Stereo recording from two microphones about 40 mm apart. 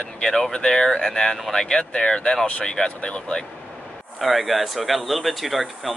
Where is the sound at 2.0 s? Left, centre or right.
Centre.